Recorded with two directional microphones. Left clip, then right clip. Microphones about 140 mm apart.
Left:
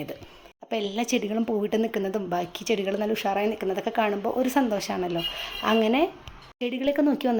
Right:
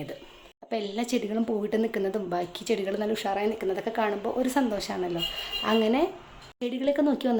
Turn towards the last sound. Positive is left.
turn(degrees=15)  # may be behind; listen again after turning